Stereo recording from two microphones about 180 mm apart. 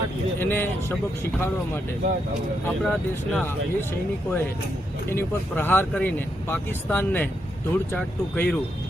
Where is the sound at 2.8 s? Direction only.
5° left (ahead or behind).